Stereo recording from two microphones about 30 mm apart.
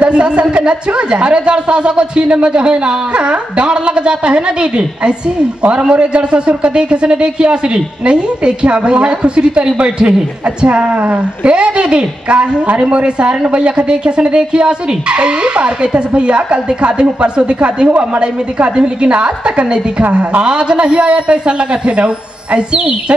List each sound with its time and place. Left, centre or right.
0.1 s speech: right
10.0 s speech: right
17.8 s a woman's voice: right
18.8 s speech: right
20.4 s speech: right